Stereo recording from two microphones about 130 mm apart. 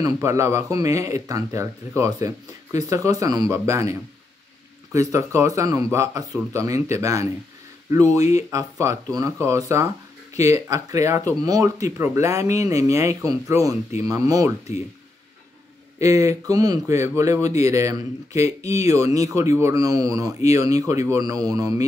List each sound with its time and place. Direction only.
0.0 s speech: 25° right (ahead or behind)
16.0 s speech: 25° right (ahead or behind)